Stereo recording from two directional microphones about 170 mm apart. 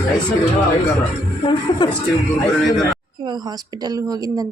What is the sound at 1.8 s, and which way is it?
Speech, 30° left (ahead or behind).